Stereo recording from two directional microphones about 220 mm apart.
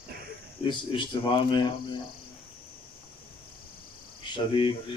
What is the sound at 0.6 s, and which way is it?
Speech, 20° left (ahead or behind).